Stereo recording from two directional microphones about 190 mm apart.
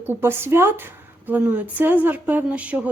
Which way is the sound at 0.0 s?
10° right (ahead or behind).